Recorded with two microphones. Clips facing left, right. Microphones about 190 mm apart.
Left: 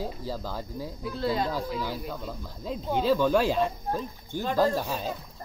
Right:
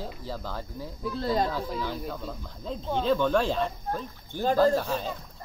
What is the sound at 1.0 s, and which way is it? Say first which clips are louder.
Speech: right 1 dB; 40° right (ahead or behind).